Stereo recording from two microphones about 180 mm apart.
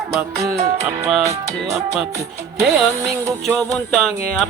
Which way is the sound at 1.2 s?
15° right (ahead or behind).